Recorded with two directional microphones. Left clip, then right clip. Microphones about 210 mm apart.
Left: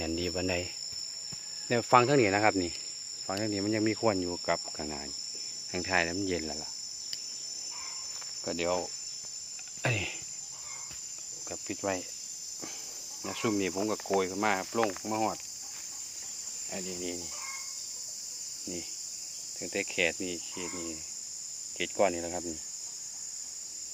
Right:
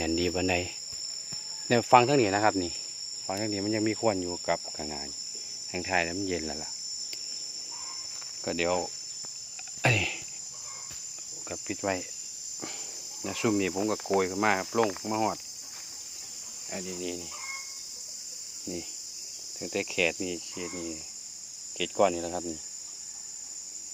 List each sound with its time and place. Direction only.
0.0 s speech: 15° right (ahead or behind)
1.9 s cricket: centre (ahead or behind)
8.4 s speech: 20° right (ahead or behind)
9.8 s cricket: 15° right (ahead or behind)
11.4 s cricket: 15° right (ahead or behind)
13.2 s speech: 20° right (ahead or behind)
16.7 s speech: 15° right (ahead or behind)
19.6 s speech: 20° right (ahead or behind)